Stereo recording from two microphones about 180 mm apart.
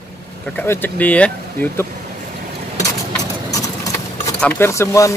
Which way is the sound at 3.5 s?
20° left (ahead or behind).